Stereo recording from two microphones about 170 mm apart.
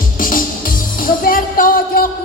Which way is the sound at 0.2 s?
55° left (ahead or behind).